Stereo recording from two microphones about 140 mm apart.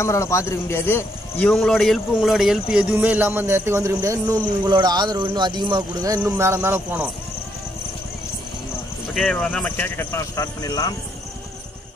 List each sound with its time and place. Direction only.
0.0 s a man's voice: 20° left (ahead or behind)
1.4 s speech: 5° left (ahead or behind); by 7.1 s 15° right (ahead or behind)
9.2 s speech: 5° left (ahead or behind); by 11.0 s 25° left (ahead or behind)